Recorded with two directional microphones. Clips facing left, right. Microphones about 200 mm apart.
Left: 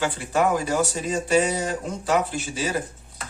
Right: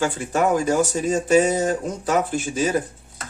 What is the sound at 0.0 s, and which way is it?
Speech, 45° right (ahead or behind).